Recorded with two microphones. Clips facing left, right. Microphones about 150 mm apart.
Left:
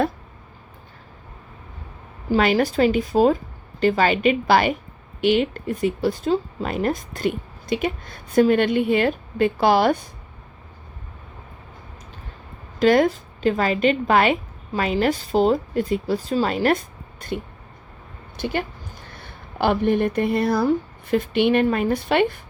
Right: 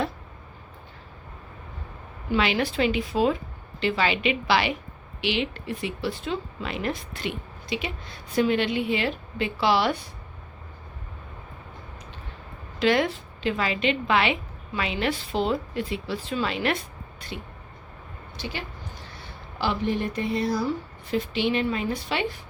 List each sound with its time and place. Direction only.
2.3 s speech: 45° left (ahead or behind)
12.8 s a woman's voice: 45° left (ahead or behind)